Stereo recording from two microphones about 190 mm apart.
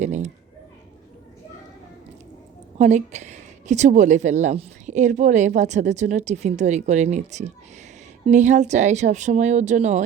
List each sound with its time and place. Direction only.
0.0 s a woman's voice: 40° right (ahead or behind)
2.7 s a woman's voice: 35° right (ahead or behind)